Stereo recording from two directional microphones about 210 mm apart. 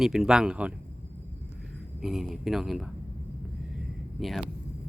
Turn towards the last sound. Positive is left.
turn(degrees=0)  # may be behind; listen again after turning